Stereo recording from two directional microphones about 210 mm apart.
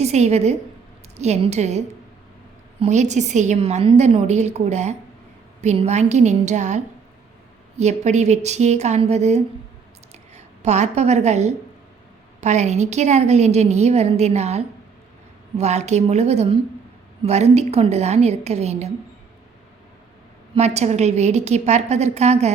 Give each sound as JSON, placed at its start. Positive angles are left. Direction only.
{"t": 0.0, "sound": "a woman's voice", "side_deg": -30}
{"t": 2.8, "sound": "a woman's voice", "side_deg": -35}
{"t": 20.6, "sound": "a woman's voice", "side_deg": -30}